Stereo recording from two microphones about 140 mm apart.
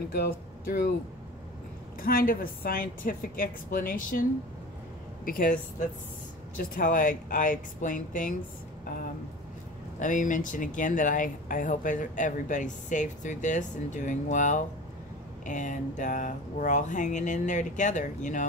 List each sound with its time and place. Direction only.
2.0 s a woman's voice: 90° left; by 8.4 s 70° left (ahead or behind)
9.9 s speech: 65° left (ahead or behind)